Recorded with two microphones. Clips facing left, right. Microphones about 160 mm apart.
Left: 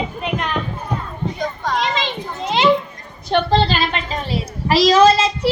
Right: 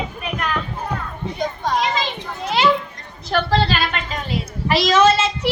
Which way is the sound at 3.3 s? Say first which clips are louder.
Left 2 dB; 25° left (ahead or behind).